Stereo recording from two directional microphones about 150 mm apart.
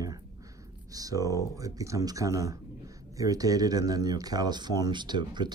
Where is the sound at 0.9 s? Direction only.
25° right (ahead or behind).